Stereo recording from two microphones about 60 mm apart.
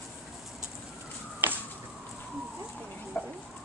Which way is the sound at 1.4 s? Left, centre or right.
Right.